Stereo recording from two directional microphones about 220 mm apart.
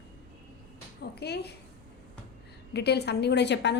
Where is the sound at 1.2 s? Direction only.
50° left (ahead or behind).